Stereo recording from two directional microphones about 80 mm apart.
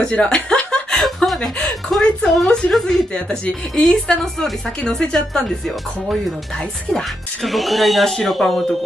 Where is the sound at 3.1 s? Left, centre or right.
Centre.